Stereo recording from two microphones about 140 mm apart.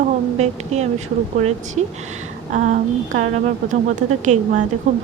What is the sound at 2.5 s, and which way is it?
Speech, 65° right (ahead or behind).